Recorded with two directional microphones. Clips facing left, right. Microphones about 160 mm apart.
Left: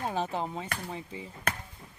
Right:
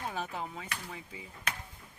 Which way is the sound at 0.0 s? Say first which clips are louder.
Left 6 dB; 30° left (ahead or behind).